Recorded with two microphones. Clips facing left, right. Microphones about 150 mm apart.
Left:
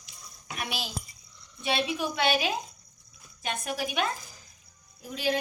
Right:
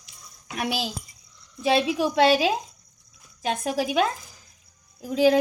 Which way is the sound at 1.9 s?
90° right.